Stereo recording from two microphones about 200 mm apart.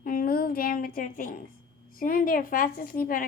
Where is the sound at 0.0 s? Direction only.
45° left (ahead or behind).